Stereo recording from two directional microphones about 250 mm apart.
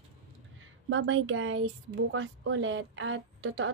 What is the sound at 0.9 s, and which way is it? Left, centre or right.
A woman's voice, right.